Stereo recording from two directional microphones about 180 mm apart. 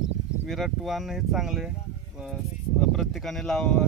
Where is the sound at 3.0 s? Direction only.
Centre (ahead or behind).